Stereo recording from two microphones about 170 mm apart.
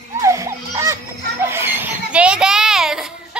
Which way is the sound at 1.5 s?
15° right (ahead or behind).